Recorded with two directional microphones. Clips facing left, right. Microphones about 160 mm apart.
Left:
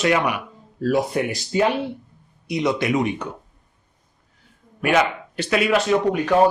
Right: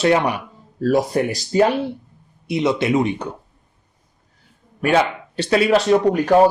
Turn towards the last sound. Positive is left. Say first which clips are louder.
# right 4 dB
turn(degrees=-35)  # may be behind; listen again after turning